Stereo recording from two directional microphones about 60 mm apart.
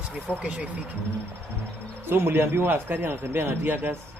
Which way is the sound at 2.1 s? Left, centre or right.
Right.